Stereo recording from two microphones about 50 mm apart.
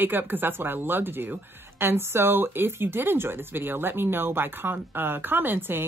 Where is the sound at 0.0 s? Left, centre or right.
Right.